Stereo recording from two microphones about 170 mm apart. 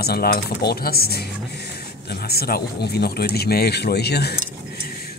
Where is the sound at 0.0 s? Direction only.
65° left (ahead or behind).